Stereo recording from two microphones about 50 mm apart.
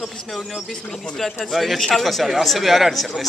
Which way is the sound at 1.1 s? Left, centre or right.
Centre.